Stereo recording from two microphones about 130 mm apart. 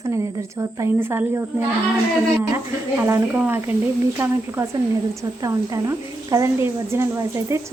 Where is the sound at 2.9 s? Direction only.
15° right (ahead or behind).